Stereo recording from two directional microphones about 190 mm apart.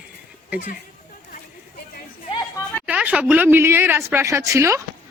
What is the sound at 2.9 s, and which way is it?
A woman's voice, 5° right (ahead or behind).